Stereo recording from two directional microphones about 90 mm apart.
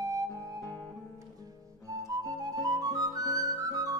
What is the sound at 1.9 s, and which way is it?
Music, 40° right (ahead or behind).